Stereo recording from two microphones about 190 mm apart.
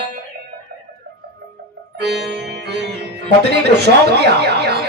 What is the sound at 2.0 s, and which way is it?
Music, 60° right (ahead or behind).